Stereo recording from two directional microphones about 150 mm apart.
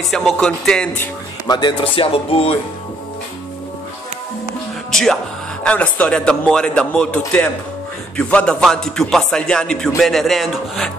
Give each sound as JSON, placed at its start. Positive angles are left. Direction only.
{"t": 0.1, "sound": "speech", "side_deg": 5}
{"t": 1.5, "sound": "speech", "side_deg": 30}
{"t": 4.9, "sound": "speech", "side_deg": 5}